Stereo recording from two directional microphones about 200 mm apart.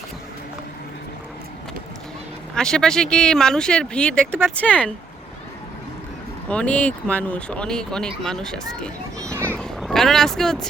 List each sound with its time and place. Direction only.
2.6 s speech: 5° left (ahead or behind)
6.5 s speech: 5° left (ahead or behind)
9.1 s a sound: 15° right (ahead or behind)
9.4 s vehicle: 5° left (ahead or behind)